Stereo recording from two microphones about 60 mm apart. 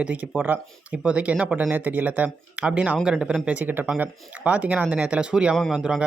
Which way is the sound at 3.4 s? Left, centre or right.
Right.